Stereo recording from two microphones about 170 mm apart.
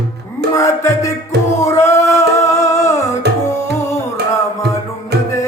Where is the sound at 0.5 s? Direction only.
15° left (ahead or behind).